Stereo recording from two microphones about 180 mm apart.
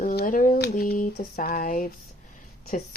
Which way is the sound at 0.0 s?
55° left (ahead or behind).